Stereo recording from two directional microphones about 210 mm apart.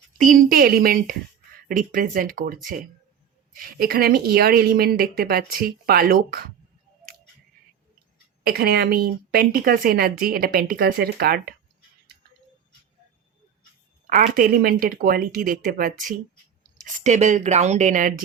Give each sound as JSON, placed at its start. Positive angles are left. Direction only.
{"t": 0.2, "sound": "a woman's voice", "side_deg": -40}
{"t": 8.4, "sound": "a woman's voice", "side_deg": -45}
{"t": 14.1, "sound": "a woman's voice", "side_deg": -45}